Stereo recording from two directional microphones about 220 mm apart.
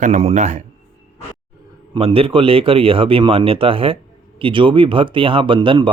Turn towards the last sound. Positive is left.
turn(degrees=-20)  # may be behind; listen again after turning